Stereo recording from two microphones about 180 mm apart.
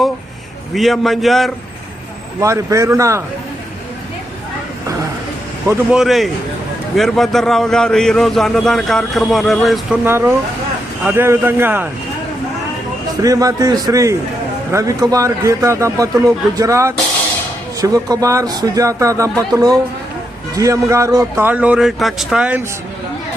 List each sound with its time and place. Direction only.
0.7 s a man's voice: centre (ahead or behind)
2.4 s a man's voice: 15° right (ahead or behind)
5.6 s a man's voice: 5° right (ahead or behind)
13.2 s a man's voice: 20° right (ahead or behind)